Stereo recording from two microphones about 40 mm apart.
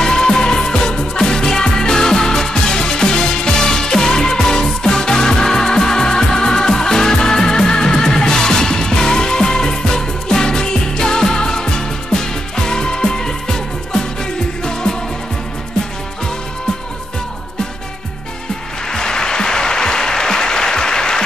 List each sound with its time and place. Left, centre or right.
0.0 s music: centre
18.9 s applause: centre